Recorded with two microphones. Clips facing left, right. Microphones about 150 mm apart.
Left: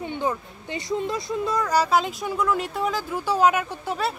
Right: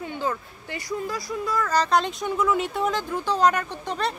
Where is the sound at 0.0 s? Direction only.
20° left (ahead or behind).